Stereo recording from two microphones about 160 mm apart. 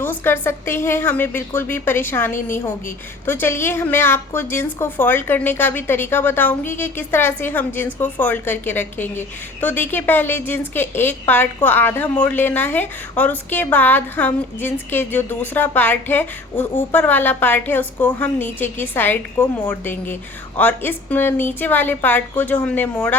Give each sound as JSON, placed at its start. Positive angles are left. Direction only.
{"t": 0.0, "sound": "a woman's voice", "side_deg": 15}